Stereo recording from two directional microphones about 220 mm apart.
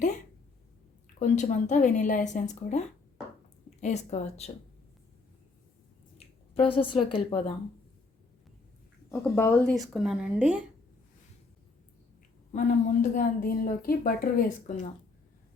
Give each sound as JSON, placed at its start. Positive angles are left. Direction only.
{"t": 1.2, "sound": "a woman's voice", "side_deg": 35}
{"t": 6.5, "sound": "a woman's voice", "side_deg": 25}
{"t": 9.3, "sound": "speech", "side_deg": 5}
{"t": 12.5, "sound": "a woman's voice", "side_deg": 35}